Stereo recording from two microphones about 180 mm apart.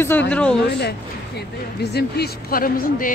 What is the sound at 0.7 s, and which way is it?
Speech, 65° left (ahead or behind).